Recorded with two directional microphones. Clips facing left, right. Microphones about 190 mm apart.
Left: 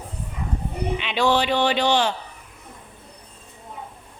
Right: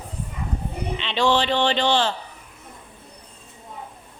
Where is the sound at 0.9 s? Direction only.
10° left (ahead or behind).